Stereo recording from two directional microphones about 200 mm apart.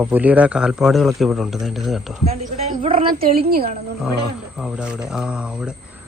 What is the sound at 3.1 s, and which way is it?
Speech, 50° right (ahead or behind).